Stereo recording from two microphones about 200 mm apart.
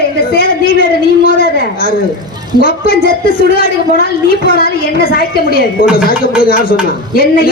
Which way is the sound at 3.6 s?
50° left (ahead or behind).